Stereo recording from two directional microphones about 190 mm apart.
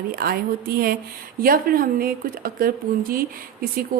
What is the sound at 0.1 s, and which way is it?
A woman's voice, 50° right (ahead or behind).